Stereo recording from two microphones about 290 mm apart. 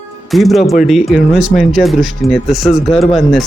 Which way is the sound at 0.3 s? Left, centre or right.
Centre.